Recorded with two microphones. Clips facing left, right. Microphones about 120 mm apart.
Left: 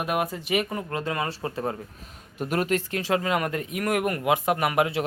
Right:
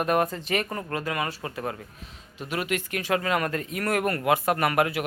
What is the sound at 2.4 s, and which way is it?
Speech, 45° left (ahead or behind).